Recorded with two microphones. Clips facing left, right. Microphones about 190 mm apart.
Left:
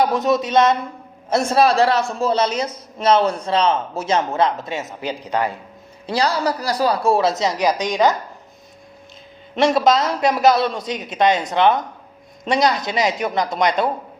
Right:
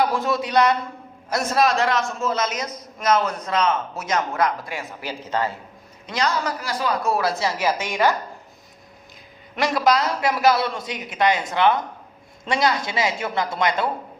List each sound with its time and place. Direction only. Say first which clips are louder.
0.0 s a man's voice: left 4 dB; 20° left (ahead or behind)
6.1 s a man's voice: left 4 dB; 35° left (ahead or behind); by 8.1 s 15° left (ahead or behind)
9.6 s a man's voice: left 4 dB; 25° left (ahead or behind)